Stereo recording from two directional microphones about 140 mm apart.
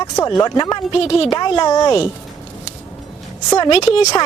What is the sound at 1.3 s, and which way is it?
Speech, 30° left (ahead or behind).